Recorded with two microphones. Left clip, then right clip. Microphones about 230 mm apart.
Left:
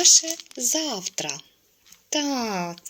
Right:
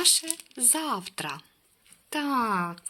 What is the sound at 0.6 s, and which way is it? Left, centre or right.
Speech, centre.